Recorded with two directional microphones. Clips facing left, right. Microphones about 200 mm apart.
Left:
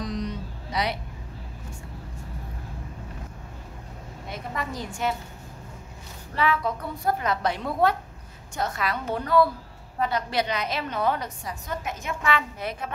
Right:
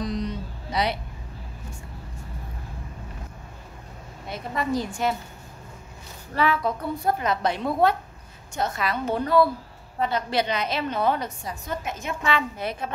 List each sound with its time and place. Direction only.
0.0 s music: 30° right (ahead or behind)
4.3 s a woman's voice: 35° right (ahead or behind)
6.3 s a woman's voice: 40° right (ahead or behind)
7.2 s a woman's voice: 25° right (ahead or behind)